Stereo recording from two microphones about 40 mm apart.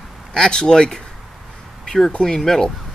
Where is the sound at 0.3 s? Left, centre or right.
Centre.